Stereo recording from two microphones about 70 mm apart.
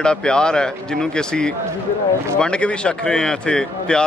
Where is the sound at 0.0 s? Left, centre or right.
Centre.